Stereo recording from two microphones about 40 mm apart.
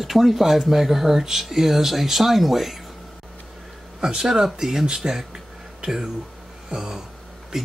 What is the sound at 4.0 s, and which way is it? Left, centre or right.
Speech, centre.